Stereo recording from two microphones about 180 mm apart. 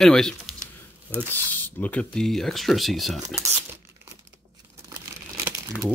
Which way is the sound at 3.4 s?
15° right (ahead or behind).